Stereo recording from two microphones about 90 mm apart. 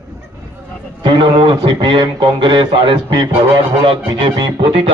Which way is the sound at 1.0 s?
70° right (ahead or behind).